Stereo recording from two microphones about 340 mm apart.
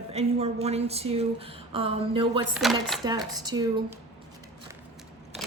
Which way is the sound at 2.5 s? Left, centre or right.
Centre.